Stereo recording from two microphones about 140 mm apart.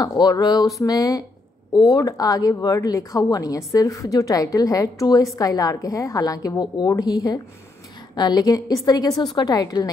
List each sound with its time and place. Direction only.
0.0 s a woman's voice: 30° left (ahead or behind)